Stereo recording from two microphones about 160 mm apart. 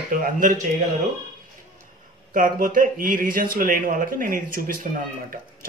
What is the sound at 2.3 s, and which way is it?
Speech, 55° right (ahead or behind).